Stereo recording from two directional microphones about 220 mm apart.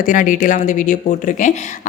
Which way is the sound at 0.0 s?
35° left (ahead or behind).